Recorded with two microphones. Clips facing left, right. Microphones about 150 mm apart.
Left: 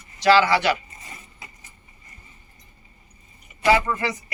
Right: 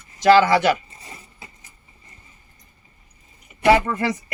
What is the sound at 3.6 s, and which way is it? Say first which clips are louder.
Speech: right 3 dB; 55° right (ahead or behind).